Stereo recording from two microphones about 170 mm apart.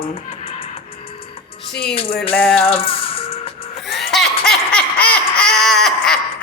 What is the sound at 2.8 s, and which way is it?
Music, 35° left (ahead or behind).